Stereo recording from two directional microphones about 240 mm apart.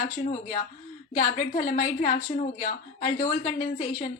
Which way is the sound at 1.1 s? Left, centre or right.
Left.